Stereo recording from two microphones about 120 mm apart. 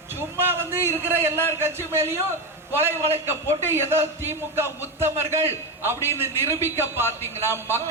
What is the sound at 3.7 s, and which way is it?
Speech, 20° right (ahead or behind).